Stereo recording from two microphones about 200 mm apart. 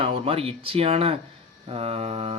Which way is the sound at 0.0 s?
30° right (ahead or behind).